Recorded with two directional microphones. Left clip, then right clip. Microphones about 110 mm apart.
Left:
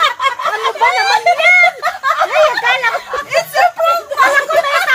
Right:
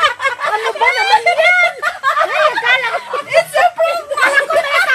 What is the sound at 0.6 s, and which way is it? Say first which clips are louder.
Snicker: left 2 dB; 15° right (ahead or behind).